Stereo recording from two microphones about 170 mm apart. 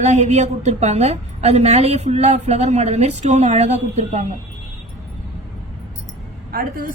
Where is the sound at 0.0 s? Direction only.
40° right (ahead or behind).